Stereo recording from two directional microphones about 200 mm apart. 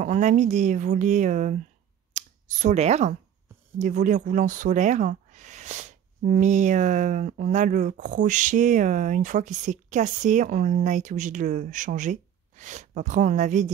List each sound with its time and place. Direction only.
0.0 s speech: 40° right (ahead or behind)